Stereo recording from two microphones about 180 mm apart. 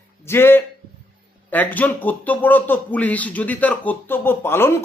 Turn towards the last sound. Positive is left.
turn(degrees=15)  # may be behind; listen again after turning